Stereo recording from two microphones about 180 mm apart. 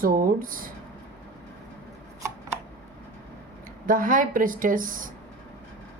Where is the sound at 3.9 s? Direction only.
50° right (ahead or behind).